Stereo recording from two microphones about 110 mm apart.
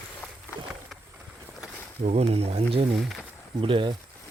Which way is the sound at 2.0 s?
70° right (ahead or behind).